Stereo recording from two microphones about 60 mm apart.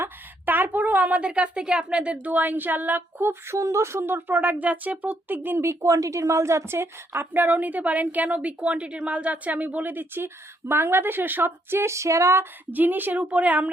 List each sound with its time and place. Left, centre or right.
0.0 s a woman's voice: right
5.6 s a woman's voice: right
12.7 s a woman's voice: right